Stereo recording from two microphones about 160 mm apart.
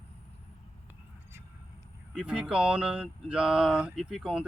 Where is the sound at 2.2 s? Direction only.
5° right (ahead or behind).